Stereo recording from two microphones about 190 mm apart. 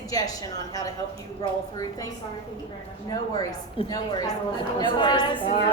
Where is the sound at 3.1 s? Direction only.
20° left (ahead or behind).